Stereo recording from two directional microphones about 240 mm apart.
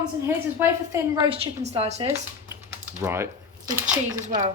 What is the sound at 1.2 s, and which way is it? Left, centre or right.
Speech, right.